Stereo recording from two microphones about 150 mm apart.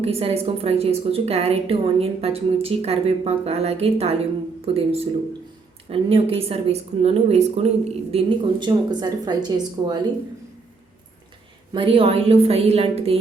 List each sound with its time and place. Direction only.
0.0 s a woman's voice: 40° right (ahead or behind)
11.7 s a woman's voice: 35° right (ahead or behind)